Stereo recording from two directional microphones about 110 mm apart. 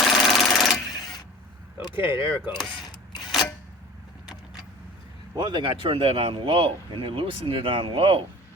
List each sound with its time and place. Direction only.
0.0 s sewing machine: 5° left (ahead or behind)
1.8 s speech: 50° left (ahead or behind)
5.4 s speech: 45° right (ahead or behind)